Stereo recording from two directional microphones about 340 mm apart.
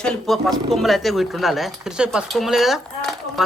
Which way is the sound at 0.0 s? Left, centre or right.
Centre.